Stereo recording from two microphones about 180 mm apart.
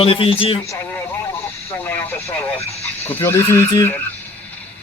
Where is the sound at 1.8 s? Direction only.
10° left (ahead or behind).